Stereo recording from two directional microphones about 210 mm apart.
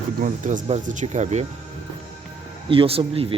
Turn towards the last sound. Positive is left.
turn(degrees=-25)  # may be behind; listen again after turning